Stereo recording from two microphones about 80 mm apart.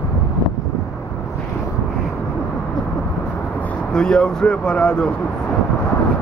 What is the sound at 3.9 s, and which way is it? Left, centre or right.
Speech, centre.